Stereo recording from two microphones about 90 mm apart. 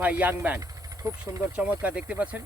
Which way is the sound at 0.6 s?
35° right (ahead or behind).